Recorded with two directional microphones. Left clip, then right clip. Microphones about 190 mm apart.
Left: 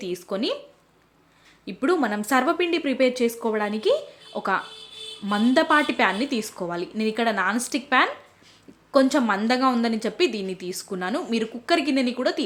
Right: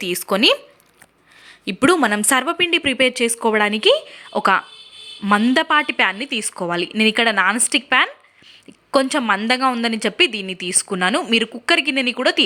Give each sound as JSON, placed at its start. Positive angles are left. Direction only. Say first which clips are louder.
{"t": 0.0, "sound": "a woman's voice", "louder": "right 11 dB", "side_deg": -25}
{"t": 1.6, "sound": "a woman's voice", "louder": "right 7 dB", "side_deg": -25}